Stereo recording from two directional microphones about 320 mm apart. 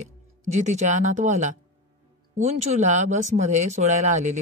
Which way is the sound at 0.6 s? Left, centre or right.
Right.